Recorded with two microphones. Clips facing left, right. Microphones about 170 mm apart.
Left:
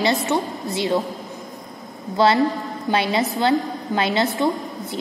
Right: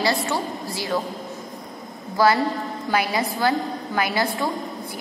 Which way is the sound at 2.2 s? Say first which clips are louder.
Left 2 dB; 25° left (ahead or behind).